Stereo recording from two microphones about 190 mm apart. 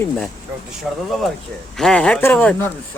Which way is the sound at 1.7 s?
5° left (ahead or behind).